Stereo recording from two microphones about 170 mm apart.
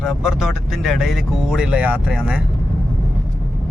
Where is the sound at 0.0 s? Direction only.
5° right (ahead or behind).